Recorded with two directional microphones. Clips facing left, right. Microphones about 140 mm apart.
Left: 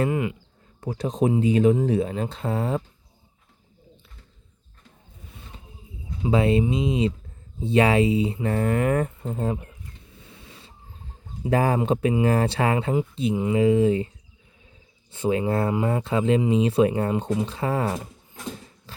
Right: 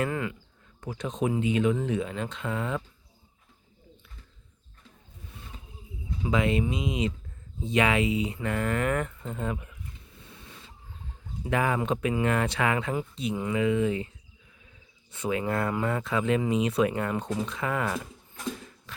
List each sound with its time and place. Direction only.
0.1 s speech: 20° left (ahead or behind)
0.8 s speech: 35° left (ahead or behind)
6.2 s speech: 30° left (ahead or behind)
11.4 s speech: 35° left (ahead or behind)
15.1 s speech: 30° left (ahead or behind)
18.9 s dog: 30° left (ahead or behind)